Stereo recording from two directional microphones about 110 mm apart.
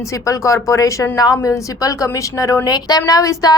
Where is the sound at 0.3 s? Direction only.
30° left (ahead or behind).